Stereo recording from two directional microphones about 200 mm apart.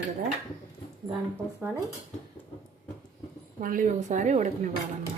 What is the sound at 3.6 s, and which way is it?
A woman's voice, 40° right (ahead or behind).